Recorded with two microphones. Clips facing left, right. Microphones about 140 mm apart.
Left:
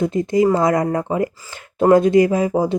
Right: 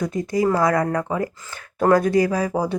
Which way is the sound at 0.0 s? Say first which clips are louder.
Left 5 dB; 25° left (ahead or behind).